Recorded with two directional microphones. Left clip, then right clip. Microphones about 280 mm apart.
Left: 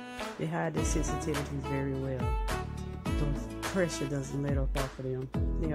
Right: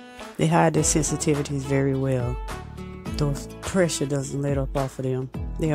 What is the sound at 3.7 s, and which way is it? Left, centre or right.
Speech, right.